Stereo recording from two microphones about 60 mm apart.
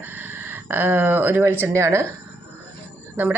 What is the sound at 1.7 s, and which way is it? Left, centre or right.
Speech, right.